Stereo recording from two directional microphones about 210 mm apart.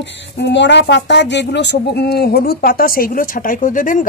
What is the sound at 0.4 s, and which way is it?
Speech, 55° left (ahead or behind).